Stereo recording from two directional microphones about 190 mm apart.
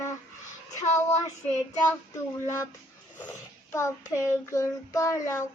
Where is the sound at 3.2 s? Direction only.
10° left (ahead or behind).